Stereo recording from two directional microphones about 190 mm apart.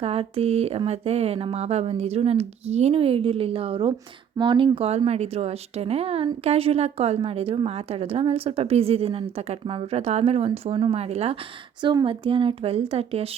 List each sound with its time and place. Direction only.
0.0 s a woman's voice: 30° right (ahead or behind)